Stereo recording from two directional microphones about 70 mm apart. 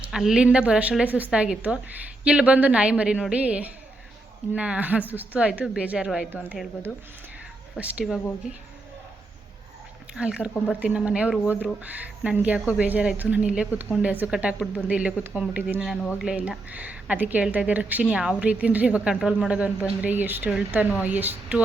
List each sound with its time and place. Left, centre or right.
0.1 s a woman's voice: centre; by 5.4 s right
5.4 s a woman's voice: centre
7.8 s a woman's voice: centre
8.0 s a woman's voice: centre
10.2 s a woman's voice: centre
18.0 s a woman's voice: centre
18.4 s a woman's voice: right